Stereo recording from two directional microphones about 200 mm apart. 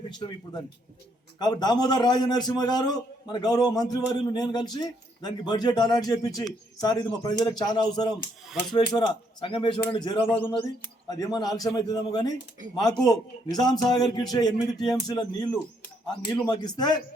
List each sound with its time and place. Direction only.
0.1 s a man's voice: 20° left (ahead or behind)